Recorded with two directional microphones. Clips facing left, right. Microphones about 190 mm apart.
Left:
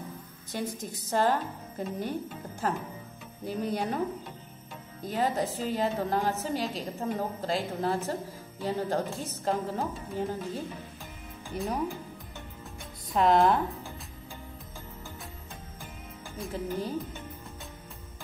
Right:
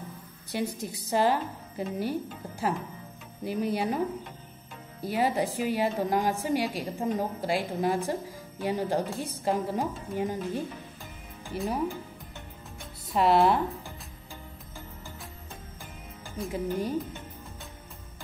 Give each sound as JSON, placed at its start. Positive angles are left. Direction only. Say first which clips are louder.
{"t": 0.5, "sound": "a woman's voice", "louder": "right 3 dB", "side_deg": -10}
{"t": 3.4, "sound": "a woman's voice", "louder": "right 2 dB", "side_deg": -10}
{"t": 5.0, "sound": "a woman's voice", "louder": "right 2 dB", "side_deg": -10}
{"t": 11.5, "sound": "speech", "louder": "right 1 dB", "side_deg": 0}
{"t": 13.1, "sound": "speech", "louder": "even", "side_deg": -5}
{"t": 16.5, "sound": "a woman's voice", "louder": "right 3 dB", "side_deg": -10}